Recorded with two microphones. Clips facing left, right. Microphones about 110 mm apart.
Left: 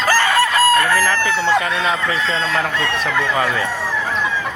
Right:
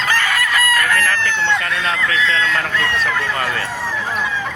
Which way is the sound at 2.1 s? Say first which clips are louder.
Right 1 dB; 30° left (ahead or behind).